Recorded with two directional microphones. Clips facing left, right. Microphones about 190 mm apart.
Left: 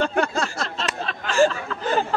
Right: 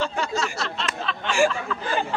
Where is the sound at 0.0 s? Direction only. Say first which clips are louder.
Left 4 dB; 55° left (ahead or behind).